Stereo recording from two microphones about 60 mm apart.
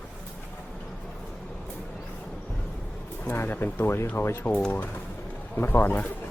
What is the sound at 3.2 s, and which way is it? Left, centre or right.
Speech, left.